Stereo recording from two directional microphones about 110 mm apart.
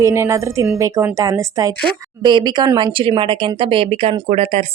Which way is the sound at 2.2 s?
45° right (ahead or behind).